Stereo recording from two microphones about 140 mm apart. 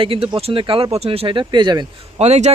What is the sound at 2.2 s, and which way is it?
Speech, 50° right (ahead or behind).